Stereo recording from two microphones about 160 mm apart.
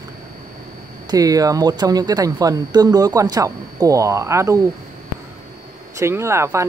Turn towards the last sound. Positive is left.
turn(degrees=-15)  # may be behind; listen again after turning